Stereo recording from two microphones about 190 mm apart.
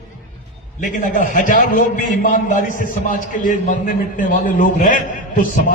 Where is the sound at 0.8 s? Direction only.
45° left (ahead or behind).